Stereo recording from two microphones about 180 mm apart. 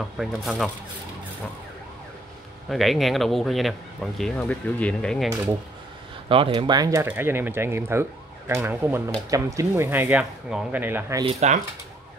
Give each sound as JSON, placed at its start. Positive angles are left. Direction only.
{"t": 0.0, "sound": "speech", "side_deg": 0}
{"t": 2.7, "sound": "speech", "side_deg": 0}
{"t": 6.2, "sound": "speech", "side_deg": -30}
{"t": 11.2, "sound": "speech", "side_deg": -35}